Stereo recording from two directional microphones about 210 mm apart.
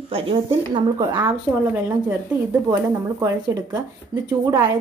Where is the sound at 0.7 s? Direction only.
20° right (ahead or behind).